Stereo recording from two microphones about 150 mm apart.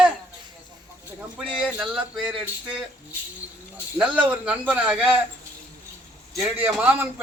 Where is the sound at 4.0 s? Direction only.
10° right (ahead or behind).